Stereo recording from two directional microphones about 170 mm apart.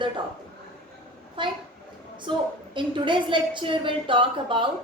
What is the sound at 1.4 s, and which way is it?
A woman's voice, 30° right (ahead or behind).